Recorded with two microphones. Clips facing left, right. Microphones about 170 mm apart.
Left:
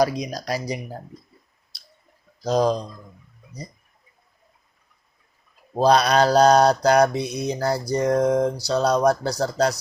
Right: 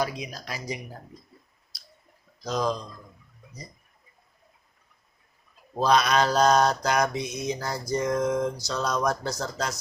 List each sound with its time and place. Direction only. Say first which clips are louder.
0.0 s mantra: left 8 dB; 40° left (ahead or behind)
1.7 s drip: even; 25° left (ahead or behind)
2.4 s mantra: left 7 dB; 35° left (ahead or behind)
5.7 s mantra: left 5 dB; 35° left (ahead or behind)